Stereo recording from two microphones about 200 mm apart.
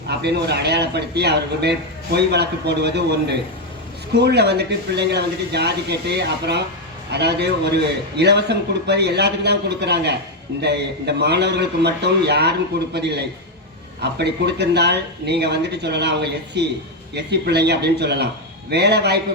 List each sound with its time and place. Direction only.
0.1 s a man's voice: 55° right (ahead or behind)
14.4 s a man's voice: 55° right (ahead or behind)
17.2 s a man's voice: 55° right (ahead or behind)